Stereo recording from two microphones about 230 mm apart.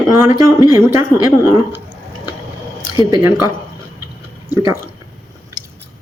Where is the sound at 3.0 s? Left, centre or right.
Centre.